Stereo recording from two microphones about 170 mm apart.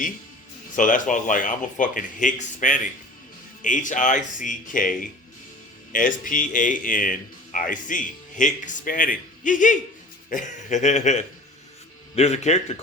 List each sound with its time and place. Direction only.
0.8 s speech: 50° left (ahead or behind)